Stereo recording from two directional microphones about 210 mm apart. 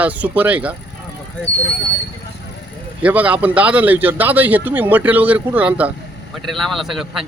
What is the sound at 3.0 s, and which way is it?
Speech, 5° right (ahead or behind).